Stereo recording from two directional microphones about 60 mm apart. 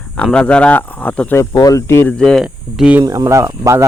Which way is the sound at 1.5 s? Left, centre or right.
Left.